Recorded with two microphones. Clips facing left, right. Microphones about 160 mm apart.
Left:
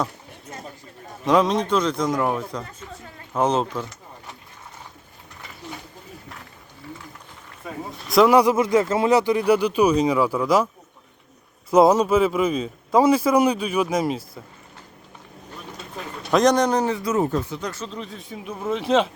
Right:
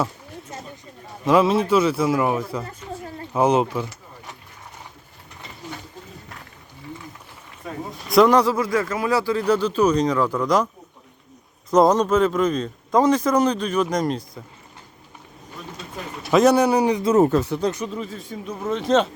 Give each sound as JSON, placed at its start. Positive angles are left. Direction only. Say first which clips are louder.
{"t": 1.2, "sound": "a man's voice", "louder": "right 2 dB", "side_deg": -5}
{"t": 8.0, "sound": "speech", "louder": "right 1 dB", "side_deg": 0}
{"t": 8.4, "sound": "a man's voice", "louder": "left 3 dB", "side_deg": 20}
{"t": 11.7, "sound": "a man's voice", "louder": "left 1 dB", "side_deg": 5}
{"t": 16.3, "sound": "a man's voice", "louder": "right 2 dB", "side_deg": -5}
{"t": 17.2, "sound": "speech", "louder": "right 5 dB", "side_deg": -75}
{"t": 17.7, "sound": "a man's voice", "louder": "right 7 dB", "side_deg": -15}
{"t": 17.9, "sound": "speech", "louder": "right 3 dB", "side_deg": 0}